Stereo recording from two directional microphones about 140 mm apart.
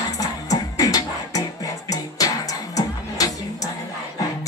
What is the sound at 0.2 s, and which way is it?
Music, 25° left (ahead or behind).